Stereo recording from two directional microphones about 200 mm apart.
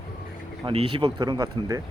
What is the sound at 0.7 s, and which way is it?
Speech, 25° right (ahead or behind).